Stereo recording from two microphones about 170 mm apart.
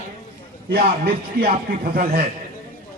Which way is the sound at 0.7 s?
65° right (ahead or behind).